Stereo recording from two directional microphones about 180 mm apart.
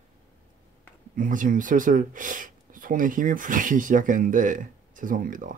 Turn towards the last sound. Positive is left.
turn(degrees=-50)  # may be behind; listen again after turning